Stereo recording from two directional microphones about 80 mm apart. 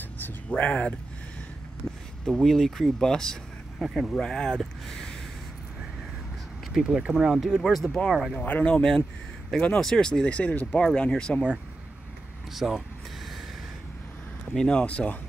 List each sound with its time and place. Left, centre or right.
0.5 s speech: centre
2.2 s speech: centre
6.7 s speech: centre
8.4 s speech: centre
12.5 s speech: centre
14.5 s speech: centre